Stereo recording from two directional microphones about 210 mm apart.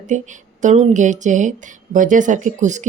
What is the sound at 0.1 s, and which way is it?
Speech, 35° right (ahead or behind).